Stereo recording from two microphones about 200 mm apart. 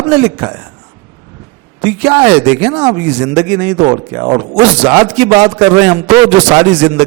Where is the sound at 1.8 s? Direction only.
20° right (ahead or behind).